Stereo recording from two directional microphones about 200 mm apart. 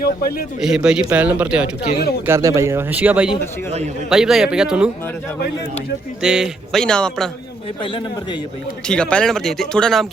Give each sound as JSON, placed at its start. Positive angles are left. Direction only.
{"t": 0.0, "sound": "a man's voice", "side_deg": 50}
{"t": 0.6, "sound": "speech", "side_deg": -5}
{"t": 6.2, "sound": "speech", "side_deg": -5}
{"t": 7.8, "sound": "a man's voice", "side_deg": 25}
{"t": 8.9, "sound": "speech", "side_deg": 5}